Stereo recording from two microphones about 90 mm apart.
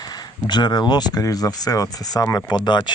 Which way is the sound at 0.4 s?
55° left (ahead or behind).